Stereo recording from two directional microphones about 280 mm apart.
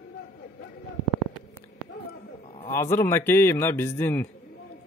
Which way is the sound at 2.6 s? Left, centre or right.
Centre.